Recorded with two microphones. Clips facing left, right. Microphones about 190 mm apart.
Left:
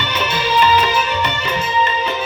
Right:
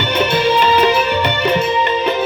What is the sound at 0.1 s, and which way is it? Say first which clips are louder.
Music: right 6 dB; 55° right (ahead or behind).